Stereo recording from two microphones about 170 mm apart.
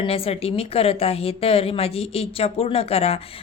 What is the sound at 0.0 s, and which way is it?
A woman's voice, 35° left (ahead or behind).